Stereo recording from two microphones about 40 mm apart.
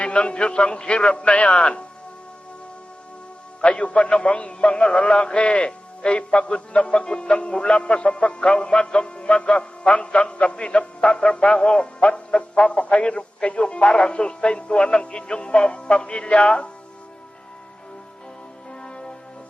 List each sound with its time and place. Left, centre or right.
0.0 s a man's voice: left
3.8 s a man's voice: left
18.7 s music: left